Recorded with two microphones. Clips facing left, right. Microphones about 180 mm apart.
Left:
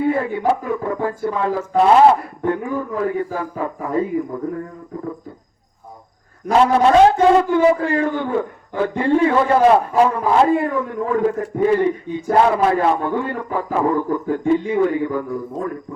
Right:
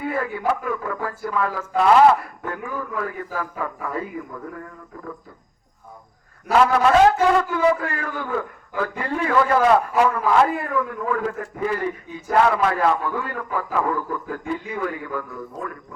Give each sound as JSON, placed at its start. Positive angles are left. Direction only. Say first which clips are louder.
{"t": 0.0, "sound": "a man's voice", "louder": "left 6 dB", "side_deg": 25}
{"t": 6.6, "sound": "a man's voice", "louder": "left 3 dB", "side_deg": 30}